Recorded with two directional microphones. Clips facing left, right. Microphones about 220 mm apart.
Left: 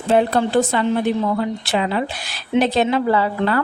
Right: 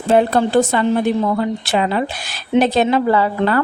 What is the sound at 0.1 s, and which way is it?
Speech, 45° right (ahead or behind).